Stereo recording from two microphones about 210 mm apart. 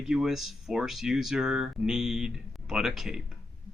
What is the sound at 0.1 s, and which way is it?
Speech, centre (ahead or behind).